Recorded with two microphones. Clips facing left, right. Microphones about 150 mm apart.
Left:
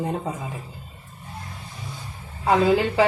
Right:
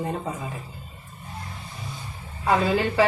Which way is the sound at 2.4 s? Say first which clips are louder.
Left 3 dB; 15° left (ahead or behind).